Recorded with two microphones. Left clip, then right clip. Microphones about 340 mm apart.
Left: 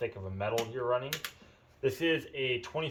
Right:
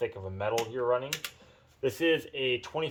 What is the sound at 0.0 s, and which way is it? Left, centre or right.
Speech, centre.